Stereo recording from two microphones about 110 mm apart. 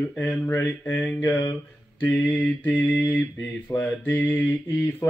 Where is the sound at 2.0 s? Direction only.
15° left (ahead or behind).